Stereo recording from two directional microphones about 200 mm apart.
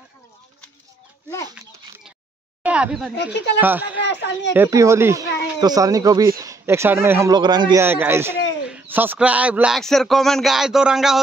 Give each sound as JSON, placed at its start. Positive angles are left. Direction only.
{"t": 2.6, "sound": "a sound", "side_deg": -5}
{"t": 3.6, "sound": "speech", "side_deg": -10}
{"t": 4.0, "sound": "speech", "side_deg": 60}
{"t": 4.6, "sound": "speech", "side_deg": -15}